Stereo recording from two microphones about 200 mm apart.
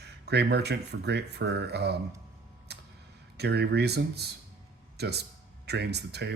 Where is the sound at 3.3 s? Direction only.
55° right (ahead or behind).